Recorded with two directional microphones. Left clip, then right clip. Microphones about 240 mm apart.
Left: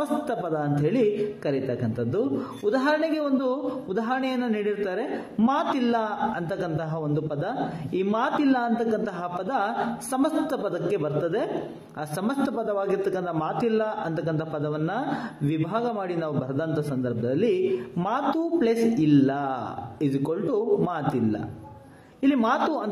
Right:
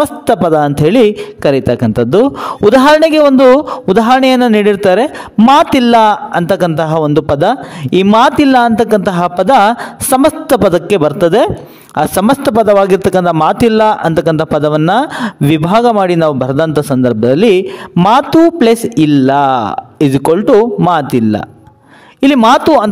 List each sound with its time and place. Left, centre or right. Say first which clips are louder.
0.0 s a man's voice: right 17 dB; right